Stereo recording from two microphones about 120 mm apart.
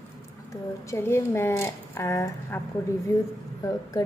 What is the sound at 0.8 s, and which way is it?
A child's voice, 20° left (ahead or behind).